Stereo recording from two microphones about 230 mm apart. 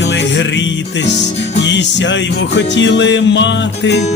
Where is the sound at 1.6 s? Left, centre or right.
Left.